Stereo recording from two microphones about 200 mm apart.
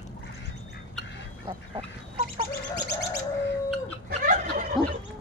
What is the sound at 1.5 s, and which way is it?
Duck, 35° right (ahead or behind).